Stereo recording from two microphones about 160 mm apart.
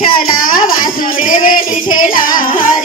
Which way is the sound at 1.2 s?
55° left (ahead or behind).